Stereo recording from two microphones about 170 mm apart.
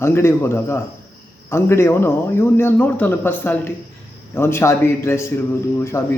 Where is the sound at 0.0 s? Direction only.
15° left (ahead or behind).